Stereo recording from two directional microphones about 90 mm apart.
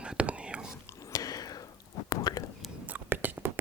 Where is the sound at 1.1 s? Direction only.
40° left (ahead or behind).